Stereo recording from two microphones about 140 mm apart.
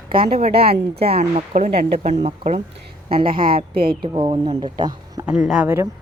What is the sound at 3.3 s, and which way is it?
Speech, 90° right.